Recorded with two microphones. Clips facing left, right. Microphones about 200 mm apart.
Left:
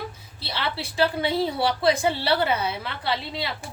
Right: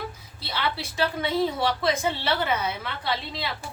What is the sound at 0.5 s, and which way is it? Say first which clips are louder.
A woman's voice: left 1 dB; 30° left (ahead or behind).